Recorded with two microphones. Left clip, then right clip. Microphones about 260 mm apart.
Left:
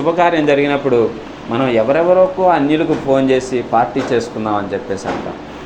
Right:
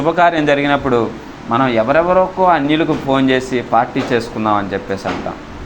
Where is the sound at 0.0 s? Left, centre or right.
Right.